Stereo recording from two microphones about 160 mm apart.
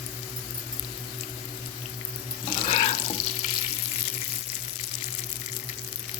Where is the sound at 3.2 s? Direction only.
45° left (ahead or behind).